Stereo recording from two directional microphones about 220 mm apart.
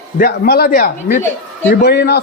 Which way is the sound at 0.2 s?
45° left (ahead or behind).